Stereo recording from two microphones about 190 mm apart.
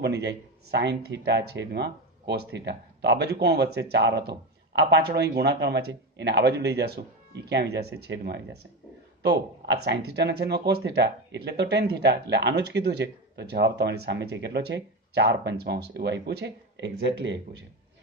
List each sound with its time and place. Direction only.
0.0 s speech: 65° right (ahead or behind)